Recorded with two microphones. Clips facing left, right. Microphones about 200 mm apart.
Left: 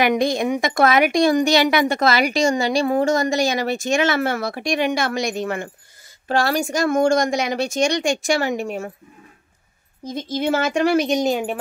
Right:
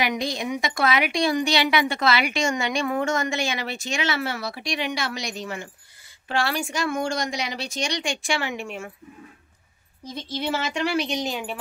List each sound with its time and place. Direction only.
0.0 s speech: 50° left (ahead or behind)
6.2 s speech: 40° left (ahead or behind)
10.0 s speech: 45° left (ahead or behind)